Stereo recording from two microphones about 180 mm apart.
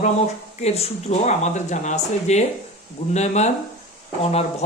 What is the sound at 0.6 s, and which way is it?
Speech, 35° left (ahead or behind).